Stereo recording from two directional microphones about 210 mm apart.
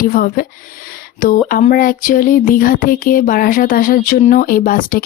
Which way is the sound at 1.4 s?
40° left (ahead or behind).